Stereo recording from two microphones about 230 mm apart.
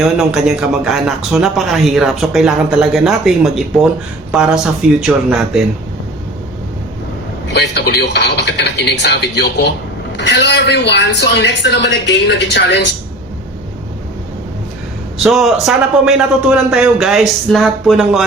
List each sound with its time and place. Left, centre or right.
0.2 s a man's voice: centre
7.5 s speech: left
15.2 s a man's voice: centre